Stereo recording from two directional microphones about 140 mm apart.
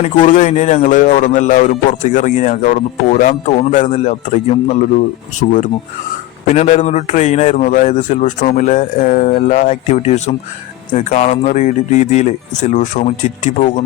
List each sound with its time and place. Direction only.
0.3 s a man's voice: 70° left (ahead or behind)
6.5 s a man's voice: 55° left (ahead or behind)